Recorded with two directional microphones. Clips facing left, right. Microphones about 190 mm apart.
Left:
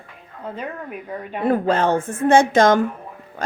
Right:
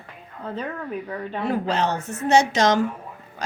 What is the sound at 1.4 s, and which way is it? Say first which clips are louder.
Speech: left 5 dB; 50° left (ahead or behind).